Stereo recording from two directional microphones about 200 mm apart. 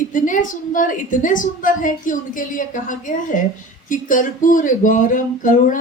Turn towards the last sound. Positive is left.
turn(degrees=40)  # may be behind; listen again after turning